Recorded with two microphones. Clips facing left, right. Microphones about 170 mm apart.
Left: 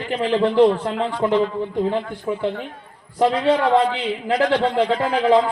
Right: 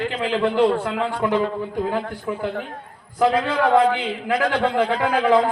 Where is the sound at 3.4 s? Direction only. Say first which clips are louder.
Left 1 dB; 30° left (ahead or behind).